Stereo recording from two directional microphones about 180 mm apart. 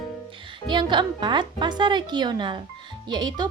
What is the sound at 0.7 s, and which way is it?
A woman's voice, 25° right (ahead or behind).